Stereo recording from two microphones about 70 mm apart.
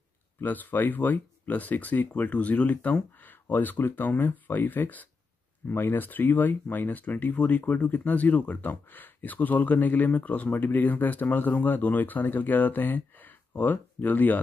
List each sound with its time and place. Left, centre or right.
0.4 s speech: left